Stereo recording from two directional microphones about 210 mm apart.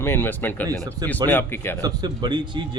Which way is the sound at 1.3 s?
10° left (ahead or behind).